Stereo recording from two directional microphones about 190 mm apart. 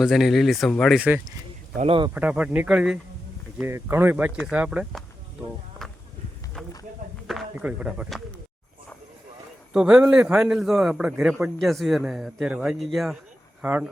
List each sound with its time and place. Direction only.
0.0 s a man's voice: centre (ahead or behind)
1.7 s speech: 35° right (ahead or behind)
2.1 s a man's voice: 5° right (ahead or behind)
5.8 s walk: 5° left (ahead or behind)
6.6 s a sound: centre (ahead or behind)
7.3 s speech: 5° right (ahead or behind)
9.7 s a man's voice: 5° right (ahead or behind)